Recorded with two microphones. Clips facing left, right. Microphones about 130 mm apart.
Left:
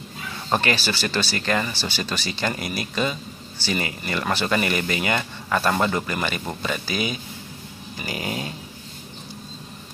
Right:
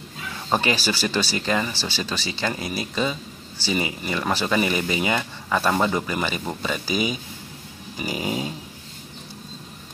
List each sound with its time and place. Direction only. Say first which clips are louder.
0.5 s speech: even; 5° right (ahead or behind)